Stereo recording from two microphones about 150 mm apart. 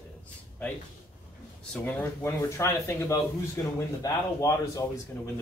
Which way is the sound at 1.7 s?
10° left (ahead or behind).